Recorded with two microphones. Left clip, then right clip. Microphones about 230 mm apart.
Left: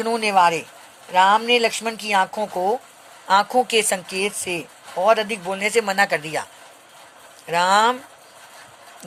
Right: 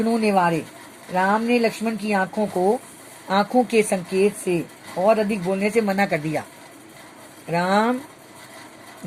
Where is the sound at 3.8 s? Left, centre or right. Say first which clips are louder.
Right 3 dB; left.